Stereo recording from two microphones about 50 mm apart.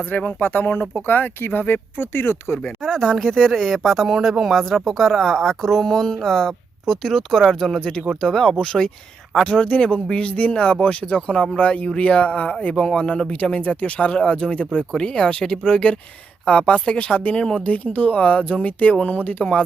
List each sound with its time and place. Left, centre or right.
0.2 s speech: left
2.6 s speech: centre
7.8 s speech: centre
13.3 s speech: left
17.3 s speech: centre
17.6 s speech: left